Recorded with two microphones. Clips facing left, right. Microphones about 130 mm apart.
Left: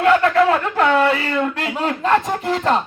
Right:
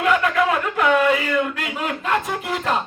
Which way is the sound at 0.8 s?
35° left (ahead or behind).